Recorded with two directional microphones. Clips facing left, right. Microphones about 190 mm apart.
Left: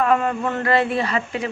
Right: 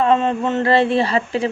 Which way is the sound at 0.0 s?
25° right (ahead or behind).